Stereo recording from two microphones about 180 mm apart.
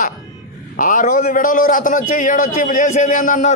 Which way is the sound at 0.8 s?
45° left (ahead or behind).